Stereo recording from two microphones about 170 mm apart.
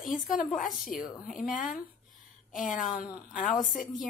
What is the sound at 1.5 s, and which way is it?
Speech, 50° left (ahead or behind).